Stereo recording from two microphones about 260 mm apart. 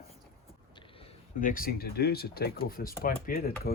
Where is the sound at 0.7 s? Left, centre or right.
Centre.